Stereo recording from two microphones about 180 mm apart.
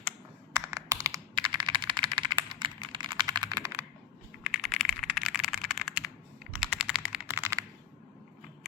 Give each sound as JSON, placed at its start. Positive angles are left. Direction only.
{"t": 0.5, "sound": "computer keyboard", "side_deg": -15}
{"t": 4.5, "sound": "typing", "side_deg": 0}